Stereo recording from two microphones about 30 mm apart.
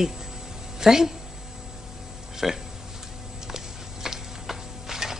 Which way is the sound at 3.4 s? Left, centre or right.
Centre.